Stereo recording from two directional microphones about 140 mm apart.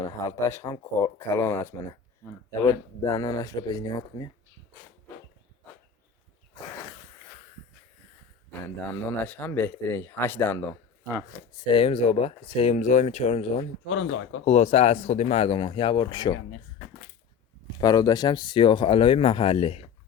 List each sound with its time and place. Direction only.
0.0 s speech: 25° left (ahead or behind)
8.6 s speech: 15° left (ahead or behind); by 12.7 s 40° left (ahead or behind)
12.7 s speech: 60° left (ahead or behind); by 16.4 s 30° left (ahead or behind)
17.7 s speech: 30° left (ahead or behind); by 19.9 s 45° left (ahead or behind)